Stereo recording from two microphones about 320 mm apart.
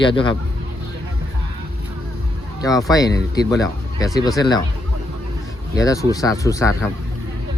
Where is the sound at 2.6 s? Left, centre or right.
Centre.